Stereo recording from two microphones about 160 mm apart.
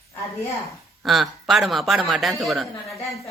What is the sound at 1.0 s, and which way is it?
Speech, centre (ahead or behind).